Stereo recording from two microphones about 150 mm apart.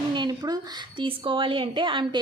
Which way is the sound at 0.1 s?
30° right (ahead or behind).